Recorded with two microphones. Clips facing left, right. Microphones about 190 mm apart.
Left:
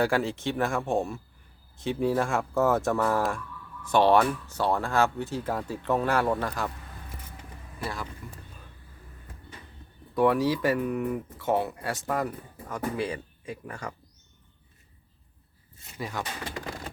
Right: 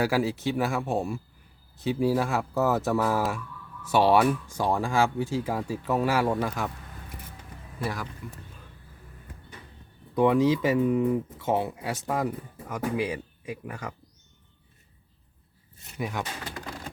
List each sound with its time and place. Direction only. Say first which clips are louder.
0.0 s speech: right 1 dB; 5° right (ahead or behind)
10.2 s speech: right 2 dB; 20° right (ahead or behind)
16.0 s speech: right 2 dB; 15° right (ahead or behind)